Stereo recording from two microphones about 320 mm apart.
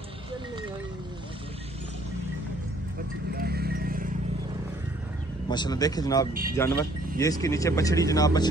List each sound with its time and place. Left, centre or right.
3.3 s livestock: right
5.5 s speech: centre